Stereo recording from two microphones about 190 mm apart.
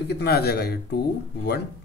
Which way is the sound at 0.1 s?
60° left (ahead or behind).